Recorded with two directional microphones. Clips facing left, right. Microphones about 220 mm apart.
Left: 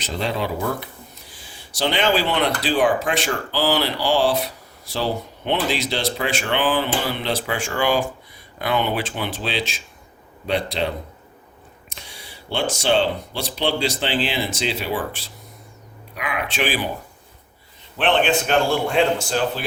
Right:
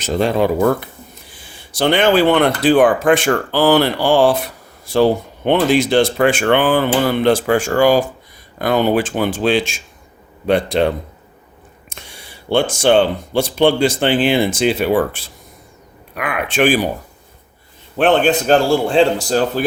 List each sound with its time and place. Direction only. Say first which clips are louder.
0.0 s speech: right 9 dB; 50° right (ahead or behind)
11.9 s speech: right 3 dB; 55° right (ahead or behind)
17.9 s speech: right 6 dB; 45° right (ahead or behind)